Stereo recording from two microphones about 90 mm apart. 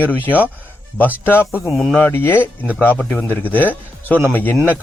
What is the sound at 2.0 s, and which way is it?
A man's voice, 25° left (ahead or behind).